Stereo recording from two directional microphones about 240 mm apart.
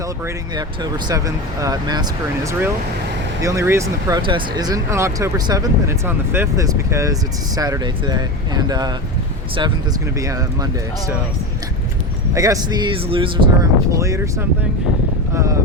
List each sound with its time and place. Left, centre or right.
0.5 s speech: centre
10.2 s speech: centre
12.3 s speech: centre